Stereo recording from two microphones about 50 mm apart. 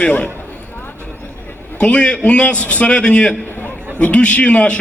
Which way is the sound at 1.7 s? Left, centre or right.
Left.